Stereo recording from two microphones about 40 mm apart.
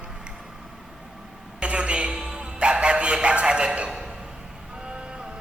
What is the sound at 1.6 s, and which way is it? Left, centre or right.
Music, right.